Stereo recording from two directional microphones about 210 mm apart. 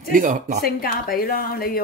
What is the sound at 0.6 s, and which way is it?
A woman's voice, 45° left (ahead or behind).